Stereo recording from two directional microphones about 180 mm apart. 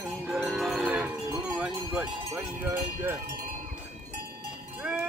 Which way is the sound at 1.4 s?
5° right (ahead or behind).